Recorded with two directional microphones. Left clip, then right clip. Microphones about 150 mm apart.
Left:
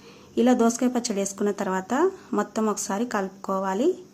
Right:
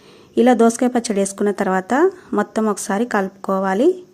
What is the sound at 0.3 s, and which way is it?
Speech, 35° right (ahead or behind).